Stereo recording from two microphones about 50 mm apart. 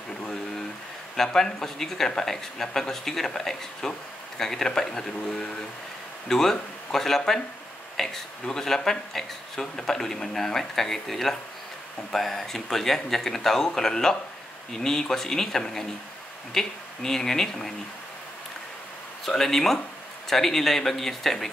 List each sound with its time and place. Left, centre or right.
1.1 s speech: centre
19.2 s speech: centre